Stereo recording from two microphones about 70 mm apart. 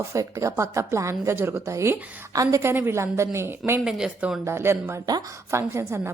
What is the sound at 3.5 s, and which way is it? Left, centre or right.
A woman's voice, right.